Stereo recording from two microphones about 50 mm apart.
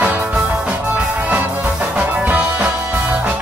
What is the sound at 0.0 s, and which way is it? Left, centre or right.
Music, right.